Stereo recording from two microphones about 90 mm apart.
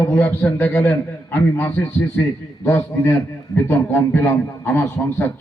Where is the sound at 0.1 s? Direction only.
25° left (ahead or behind).